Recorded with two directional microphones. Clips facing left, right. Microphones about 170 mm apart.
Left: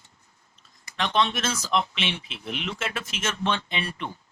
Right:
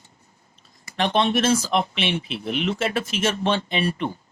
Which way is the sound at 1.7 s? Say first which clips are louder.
Right 4 dB; 45° right (ahead or behind).